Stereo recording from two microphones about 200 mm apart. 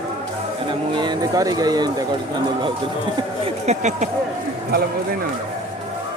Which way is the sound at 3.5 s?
35° right (ahead or behind).